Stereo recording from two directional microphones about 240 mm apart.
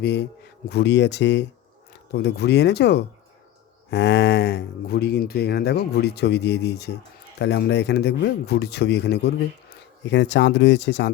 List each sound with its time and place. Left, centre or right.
0.0 s speech: left